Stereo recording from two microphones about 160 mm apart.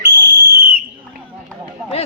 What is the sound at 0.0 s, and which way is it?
Whistle, 90° right.